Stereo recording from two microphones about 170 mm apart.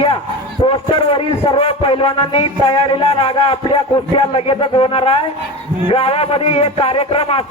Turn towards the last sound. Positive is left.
turn(degrees=35)  # may be behind; listen again after turning